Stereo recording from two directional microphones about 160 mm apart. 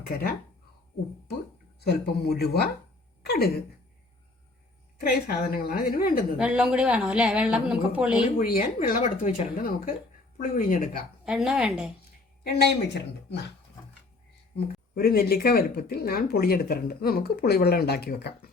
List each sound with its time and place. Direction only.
1.8 s speech: 90° left
3.2 s speech: 75° left (ahead or behind)
4.9 s speech: 65° left (ahead or behind)
6.4 s speech: 5° right (ahead or behind)
8.4 s speech: 60° left (ahead or behind)
11.3 s a woman's voice: 5° right (ahead or behind)
12.4 s speech: 85° left
14.5 s speech: 70° left (ahead or behind)